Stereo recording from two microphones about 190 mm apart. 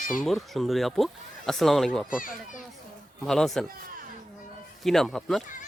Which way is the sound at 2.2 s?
45° left (ahead or behind).